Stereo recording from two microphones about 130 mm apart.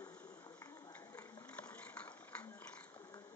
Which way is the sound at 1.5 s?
10° left (ahead or behind).